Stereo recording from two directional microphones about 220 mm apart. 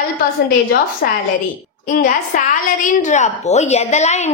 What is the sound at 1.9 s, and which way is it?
A woman's voice, 40° left (ahead or behind).